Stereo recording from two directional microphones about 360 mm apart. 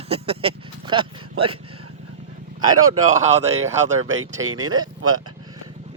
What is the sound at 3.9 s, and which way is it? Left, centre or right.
Speech, right.